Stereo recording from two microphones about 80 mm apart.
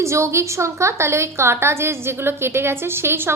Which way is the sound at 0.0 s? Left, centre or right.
Right.